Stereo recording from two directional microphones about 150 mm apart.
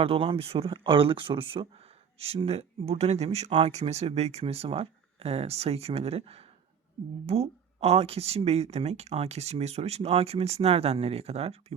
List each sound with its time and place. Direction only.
0.0 s speech: 40° right (ahead or behind)